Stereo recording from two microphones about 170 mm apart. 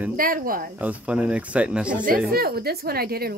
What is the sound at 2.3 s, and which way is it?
A woman's voice, 65° right (ahead or behind).